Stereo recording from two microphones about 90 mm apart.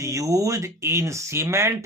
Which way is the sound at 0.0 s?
40° right (ahead or behind).